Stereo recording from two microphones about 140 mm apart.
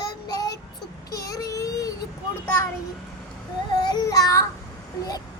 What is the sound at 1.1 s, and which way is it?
Speech, 25° left (ahead or behind).